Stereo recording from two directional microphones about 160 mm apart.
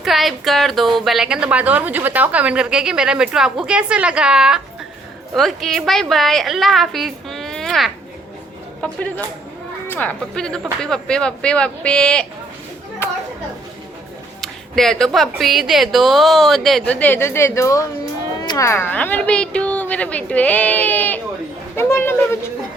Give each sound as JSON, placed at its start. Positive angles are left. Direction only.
{"t": 0.0, "sound": "a woman's voice", "side_deg": 0}
{"t": 13.0, "sound": "chatter", "side_deg": 15}
{"t": 14.4, "sound": "a woman's voice", "side_deg": 0}